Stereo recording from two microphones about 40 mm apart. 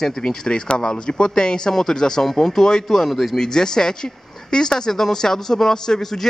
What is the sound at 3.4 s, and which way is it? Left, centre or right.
Speech, centre.